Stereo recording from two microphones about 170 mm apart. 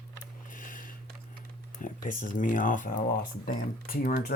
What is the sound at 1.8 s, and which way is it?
Speech, 50° left (ahead or behind).